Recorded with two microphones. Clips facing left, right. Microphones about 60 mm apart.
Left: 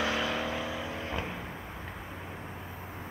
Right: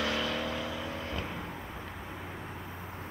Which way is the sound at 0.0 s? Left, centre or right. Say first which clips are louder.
Left 1 dB; centre.